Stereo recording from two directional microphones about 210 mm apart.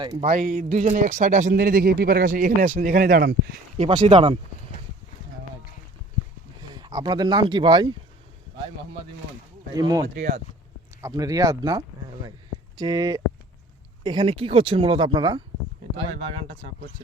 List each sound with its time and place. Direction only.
0.2 s speech: 40° right (ahead or behind)
3.8 s speech: 25° right (ahead or behind)
6.7 s speech: 20° right (ahead or behind)
9.7 s speech: 20° right (ahead or behind)
10.2 s speech: 40° right (ahead or behind)
11.0 s speech: 15° right (ahead or behind)